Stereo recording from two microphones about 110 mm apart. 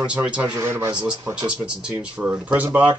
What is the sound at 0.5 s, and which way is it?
Speech, 25° right (ahead or behind).